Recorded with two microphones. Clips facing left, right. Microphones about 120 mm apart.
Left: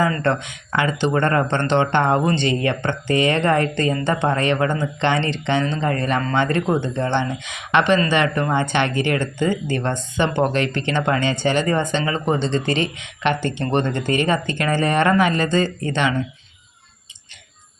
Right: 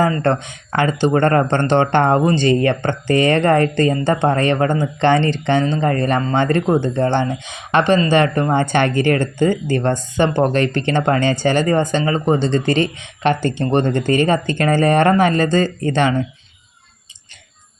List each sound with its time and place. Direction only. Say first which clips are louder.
0.0 s speech: right 3 dB; 40° right (ahead or behind)